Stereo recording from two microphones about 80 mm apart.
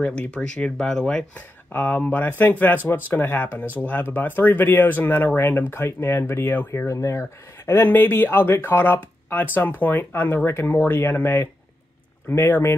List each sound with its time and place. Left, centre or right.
0.0 s speech: centre
1.7 s speech: left